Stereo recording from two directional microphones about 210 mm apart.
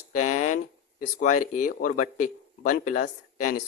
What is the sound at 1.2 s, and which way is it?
Speech, 35° left (ahead or behind).